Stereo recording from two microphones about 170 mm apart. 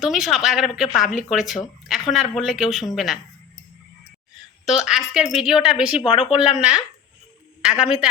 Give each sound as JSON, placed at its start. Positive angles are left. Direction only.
{"t": 0.0, "sound": "speech", "side_deg": 0}
{"t": 4.6, "sound": "speech", "side_deg": 0}
{"t": 6.0, "sound": "speech", "side_deg": 30}
{"t": 6.3, "sound": "speech", "side_deg": -5}